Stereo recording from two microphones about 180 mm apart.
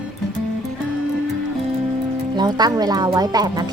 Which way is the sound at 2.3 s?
20° right (ahead or behind).